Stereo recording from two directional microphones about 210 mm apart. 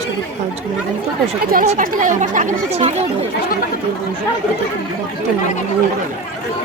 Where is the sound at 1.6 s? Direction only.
35° right (ahead or behind).